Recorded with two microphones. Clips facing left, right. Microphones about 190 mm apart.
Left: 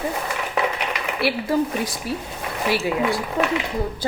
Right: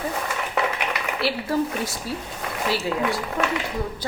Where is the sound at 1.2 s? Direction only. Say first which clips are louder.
Left 3 dB; 15° left (ahead or behind).